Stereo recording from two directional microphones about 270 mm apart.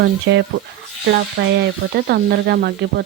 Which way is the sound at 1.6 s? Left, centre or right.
Right.